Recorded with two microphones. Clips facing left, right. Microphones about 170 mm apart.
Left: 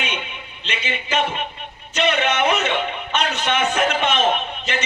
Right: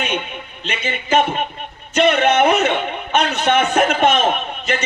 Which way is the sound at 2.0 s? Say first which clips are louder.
Right 6 dB; 50° right (ahead or behind).